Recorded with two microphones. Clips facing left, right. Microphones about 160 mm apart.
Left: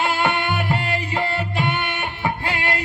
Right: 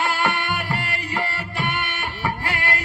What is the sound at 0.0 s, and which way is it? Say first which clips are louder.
Music: left 2 dB; 20° left (ahead or behind).